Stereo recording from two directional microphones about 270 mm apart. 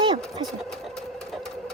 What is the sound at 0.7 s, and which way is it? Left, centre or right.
Sewing machine, centre.